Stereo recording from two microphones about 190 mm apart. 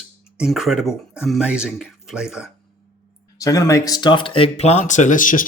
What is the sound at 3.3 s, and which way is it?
Speech, 15° left (ahead or behind).